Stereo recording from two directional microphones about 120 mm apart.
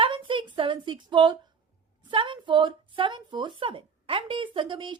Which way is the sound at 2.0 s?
45° right (ahead or behind).